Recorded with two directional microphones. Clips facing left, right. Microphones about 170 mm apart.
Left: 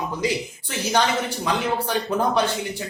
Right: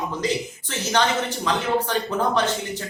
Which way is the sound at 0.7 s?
10° left (ahead or behind).